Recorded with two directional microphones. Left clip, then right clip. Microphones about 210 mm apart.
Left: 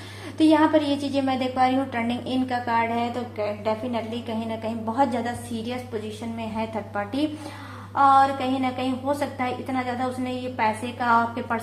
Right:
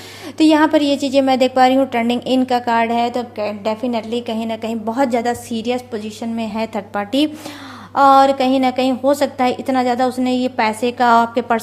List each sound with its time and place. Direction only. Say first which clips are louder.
0.3 s a woman's voice: right 6 dB; 45° right (ahead or behind)